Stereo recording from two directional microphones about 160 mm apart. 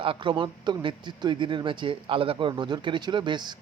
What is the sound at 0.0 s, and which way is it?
Speech, 35° right (ahead or behind).